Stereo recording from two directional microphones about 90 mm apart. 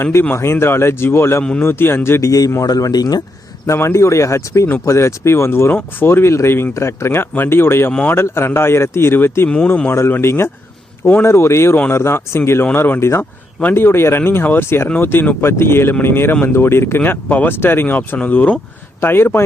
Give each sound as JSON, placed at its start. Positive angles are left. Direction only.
{"t": 0.0, "sound": "speech", "side_deg": 25}
{"t": 2.6, "sound": "speech", "side_deg": 40}
{"t": 3.7, "sound": "speech", "side_deg": 30}
{"t": 9.5, "sound": "speech", "side_deg": 15}
{"t": 9.9, "sound": "speech", "side_deg": 30}